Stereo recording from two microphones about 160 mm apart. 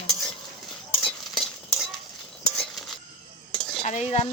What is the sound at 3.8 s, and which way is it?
Dishes, 45° left (ahead or behind).